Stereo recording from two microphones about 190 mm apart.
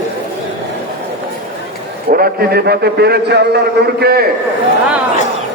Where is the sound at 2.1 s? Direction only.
55° right (ahead or behind).